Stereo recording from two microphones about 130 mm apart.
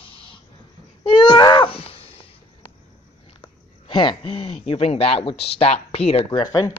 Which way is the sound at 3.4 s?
40° left (ahead or behind).